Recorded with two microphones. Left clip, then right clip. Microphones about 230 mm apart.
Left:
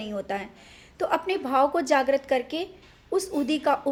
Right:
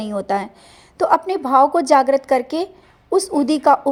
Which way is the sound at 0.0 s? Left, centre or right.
Right.